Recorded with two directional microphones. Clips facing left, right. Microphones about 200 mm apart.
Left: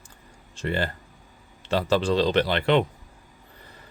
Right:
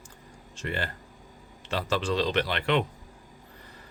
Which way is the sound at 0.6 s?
30° left (ahead or behind).